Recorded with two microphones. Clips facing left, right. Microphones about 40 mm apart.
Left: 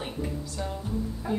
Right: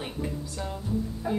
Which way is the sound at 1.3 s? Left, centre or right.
Centre.